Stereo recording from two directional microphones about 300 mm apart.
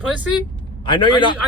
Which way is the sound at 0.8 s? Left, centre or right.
Centre.